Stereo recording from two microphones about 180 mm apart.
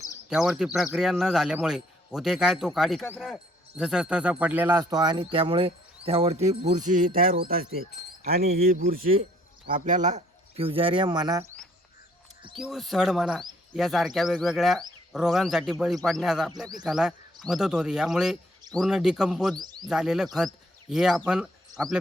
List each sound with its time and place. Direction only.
0.3 s speech: 5° right (ahead or behind); by 6.7 s 35° right (ahead or behind)
6.7 s speech: 45° right (ahead or behind); by 11.5 s 20° right (ahead or behind)
12.5 s speech: centre (ahead or behind)
19.5 s speech: 20° right (ahead or behind)
19.9 s speech: 5° right (ahead or behind)
21.7 s speech: 20° right (ahead or behind)